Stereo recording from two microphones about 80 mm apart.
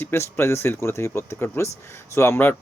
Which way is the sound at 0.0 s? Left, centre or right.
Left.